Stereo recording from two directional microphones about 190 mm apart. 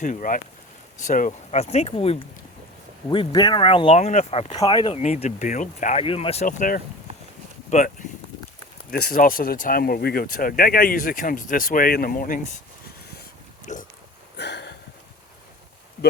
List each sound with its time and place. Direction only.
0.0 s speech: 40° left (ahead or behind); by 4.9 s 25° left (ahead or behind)
4.9 s speech: 35° left (ahead or behind)
6.4 s speech: 45° left (ahead or behind)
7.1 s a sound: 30° right (ahead or behind)
7.7 s speech: 40° left (ahead or behind)
8.9 s speech: 55° left (ahead or behind)
13.7 s speech: 40° left (ahead or behind)
14.3 s a sound: 65° left (ahead or behind)